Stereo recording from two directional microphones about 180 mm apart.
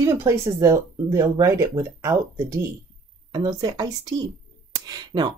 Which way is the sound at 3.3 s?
20° right (ahead or behind).